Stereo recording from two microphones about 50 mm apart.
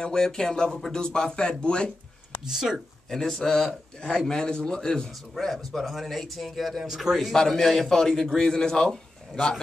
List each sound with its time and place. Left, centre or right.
0.0 s a man's voice: centre
2.4 s speech: centre
3.1 s a man's voice: centre
5.3 s a man's voice: centre